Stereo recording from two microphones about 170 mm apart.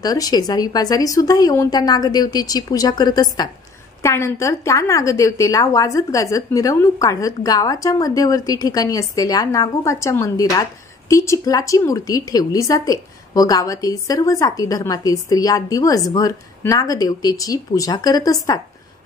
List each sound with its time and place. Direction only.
0.0 s a woman's voice: 20° left (ahead or behind)